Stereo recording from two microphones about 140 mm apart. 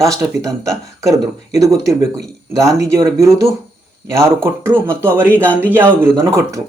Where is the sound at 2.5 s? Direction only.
20° right (ahead or behind).